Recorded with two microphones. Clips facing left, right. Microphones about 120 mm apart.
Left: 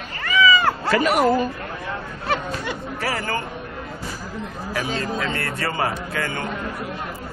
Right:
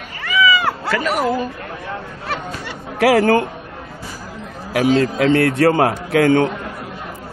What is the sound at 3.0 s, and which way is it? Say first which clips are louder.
Speech: right 14 dB; 75° right (ahead or behind).